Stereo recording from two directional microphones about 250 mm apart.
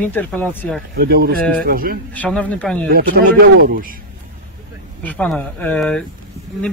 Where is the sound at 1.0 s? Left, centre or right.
Right.